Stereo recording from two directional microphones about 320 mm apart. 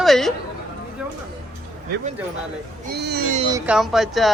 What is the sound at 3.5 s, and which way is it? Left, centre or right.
Speech, centre.